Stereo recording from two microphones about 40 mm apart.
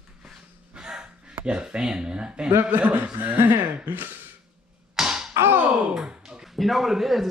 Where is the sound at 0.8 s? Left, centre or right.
Centre.